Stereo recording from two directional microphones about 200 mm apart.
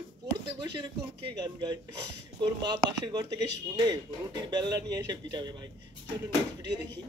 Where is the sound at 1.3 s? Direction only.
20° right (ahead or behind).